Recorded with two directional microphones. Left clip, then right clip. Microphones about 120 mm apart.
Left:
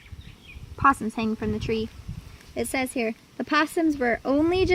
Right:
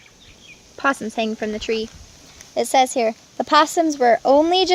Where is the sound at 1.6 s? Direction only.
45° left (ahead or behind).